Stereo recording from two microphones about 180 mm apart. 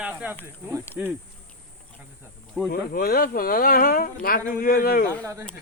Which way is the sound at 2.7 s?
55° left (ahead or behind).